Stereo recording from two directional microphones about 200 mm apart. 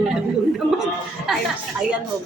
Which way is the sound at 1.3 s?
Centre (ahead or behind).